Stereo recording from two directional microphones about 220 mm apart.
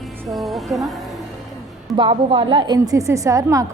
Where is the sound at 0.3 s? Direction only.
Centre (ahead or behind).